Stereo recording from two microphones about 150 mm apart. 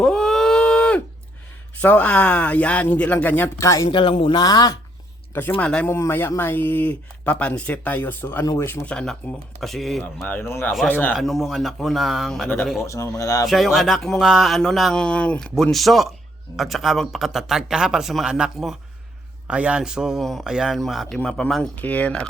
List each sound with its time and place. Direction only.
0.0 s a sound: 5° left (ahead or behind)
1.8 s a man's voice: 10° left (ahead or behind)
3.8 s speech: 35° left (ahead or behind)
5.3 s a man's voice: 15° left (ahead or behind)
10.0 s a man's voice: 15° left (ahead or behind)
11.1 s speech: centre (ahead or behind)
12.8 s speech: 20° left (ahead or behind)
13.5 s a man's voice: centre (ahead or behind)